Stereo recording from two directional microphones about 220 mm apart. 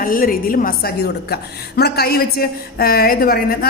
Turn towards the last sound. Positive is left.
turn(degrees=45)  # may be behind; listen again after turning